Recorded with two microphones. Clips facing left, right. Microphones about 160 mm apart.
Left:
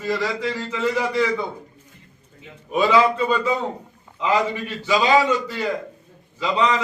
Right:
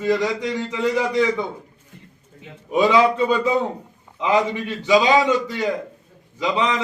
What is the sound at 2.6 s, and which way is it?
A man's voice, 15° right (ahead or behind).